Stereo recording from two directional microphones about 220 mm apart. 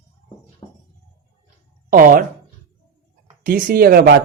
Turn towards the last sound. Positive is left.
turn(degrees=-45)  # may be behind; listen again after turning